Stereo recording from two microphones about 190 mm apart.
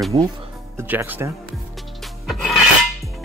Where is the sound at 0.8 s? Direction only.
10° right (ahead or behind).